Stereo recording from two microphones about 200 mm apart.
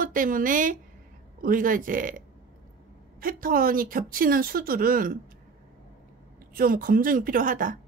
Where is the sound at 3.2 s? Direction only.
45° right (ahead or behind).